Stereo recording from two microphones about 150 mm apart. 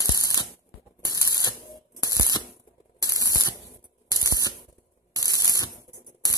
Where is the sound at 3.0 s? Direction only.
25° left (ahead or behind).